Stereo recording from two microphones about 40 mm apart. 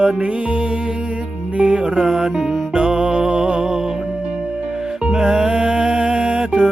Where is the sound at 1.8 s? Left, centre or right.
Centre.